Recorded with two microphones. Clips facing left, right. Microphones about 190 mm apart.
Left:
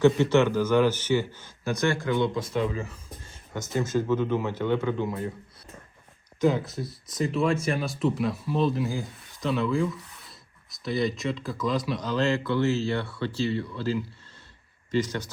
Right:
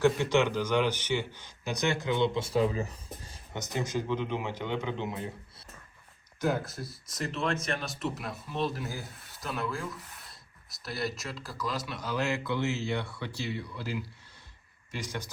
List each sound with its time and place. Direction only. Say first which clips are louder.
0.2 s speech: left 5 dB; 15° right (ahead or behind); by 3.3 s 35° right (ahead or behind)
3.8 s speech: left 6 dB; 15° right (ahead or behind)
6.4 s speech: left 6 dB; centre (ahead or behind)